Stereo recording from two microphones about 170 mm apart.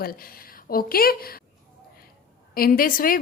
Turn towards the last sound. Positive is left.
turn(degrees=55)  # may be behind; listen again after turning